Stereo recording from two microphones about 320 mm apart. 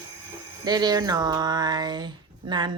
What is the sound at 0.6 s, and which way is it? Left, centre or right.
Speech, centre.